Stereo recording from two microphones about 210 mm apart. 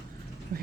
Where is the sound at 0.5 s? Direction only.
40° right (ahead or behind).